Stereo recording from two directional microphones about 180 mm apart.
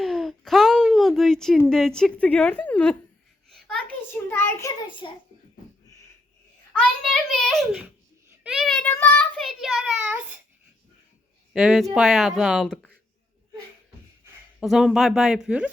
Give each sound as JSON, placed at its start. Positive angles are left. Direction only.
{"t": 0.0, "sound": "a sound", "side_deg": 0}
{"t": 3.5, "sound": "a child's voice", "side_deg": 5}
{"t": 4.9, "sound": "a child's voice", "side_deg": 25}
{"t": 6.7, "sound": "a child's voice", "side_deg": 5}
{"t": 11.5, "sound": "a child's voice", "side_deg": -5}
{"t": 14.6, "sound": "a child's voice", "side_deg": 0}